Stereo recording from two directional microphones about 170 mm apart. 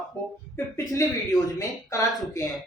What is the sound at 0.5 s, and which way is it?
Speech, 20° left (ahead or behind).